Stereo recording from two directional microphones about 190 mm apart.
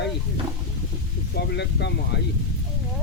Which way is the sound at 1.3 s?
60° left (ahead or behind).